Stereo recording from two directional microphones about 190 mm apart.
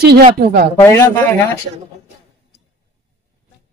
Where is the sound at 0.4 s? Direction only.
55° right (ahead or behind).